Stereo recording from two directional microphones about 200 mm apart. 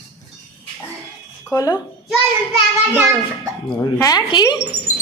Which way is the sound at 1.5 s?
15° left (ahead or behind).